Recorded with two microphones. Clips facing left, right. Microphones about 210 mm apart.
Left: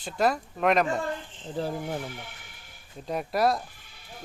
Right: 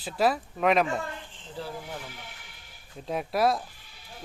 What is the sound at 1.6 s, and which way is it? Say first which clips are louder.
Speech: left 6 dB; 45° left (ahead or behind).